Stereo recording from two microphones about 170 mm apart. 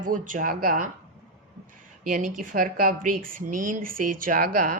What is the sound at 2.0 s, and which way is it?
Speech, 50° right (ahead or behind).